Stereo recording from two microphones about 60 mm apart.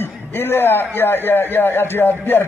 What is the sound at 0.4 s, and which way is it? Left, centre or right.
A man's voice, left.